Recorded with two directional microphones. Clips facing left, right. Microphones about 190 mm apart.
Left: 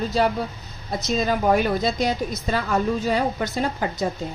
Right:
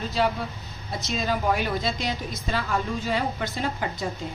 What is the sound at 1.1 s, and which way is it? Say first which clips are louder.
A woman's voice: left 5 dB; 45° left (ahead or behind).